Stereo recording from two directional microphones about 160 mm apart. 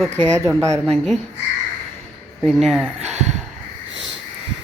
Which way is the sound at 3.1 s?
45° right (ahead or behind).